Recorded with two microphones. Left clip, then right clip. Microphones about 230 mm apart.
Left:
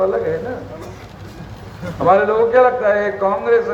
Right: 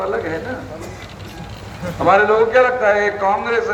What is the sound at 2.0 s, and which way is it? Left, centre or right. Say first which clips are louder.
A man's voice: even; left.